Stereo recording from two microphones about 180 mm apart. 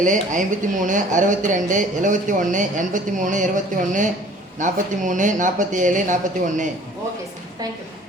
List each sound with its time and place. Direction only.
0.0 s speech: 45° right (ahead or behind)